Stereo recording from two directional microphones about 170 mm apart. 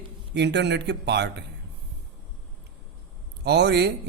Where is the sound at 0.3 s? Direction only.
90° right.